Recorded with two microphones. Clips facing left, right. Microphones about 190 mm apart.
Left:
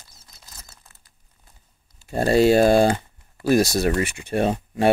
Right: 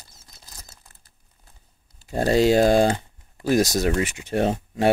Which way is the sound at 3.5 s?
15° right (ahead or behind).